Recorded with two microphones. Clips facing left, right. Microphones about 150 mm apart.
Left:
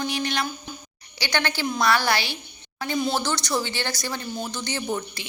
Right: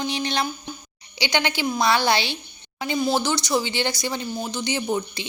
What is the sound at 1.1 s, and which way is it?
A woman's voice, 15° right (ahead or behind).